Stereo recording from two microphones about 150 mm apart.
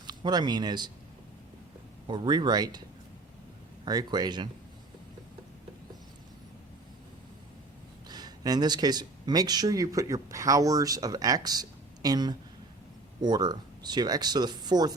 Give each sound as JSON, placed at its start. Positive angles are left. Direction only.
{"t": 0.1, "sound": "speech", "side_deg": -30}
{"t": 2.0, "sound": "speech", "side_deg": -30}
{"t": 3.8, "sound": "speech", "side_deg": -25}
{"t": 8.0, "sound": "speech", "side_deg": -25}